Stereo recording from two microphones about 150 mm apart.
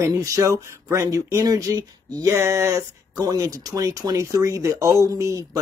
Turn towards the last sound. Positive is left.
turn(degrees=-20)  # may be behind; listen again after turning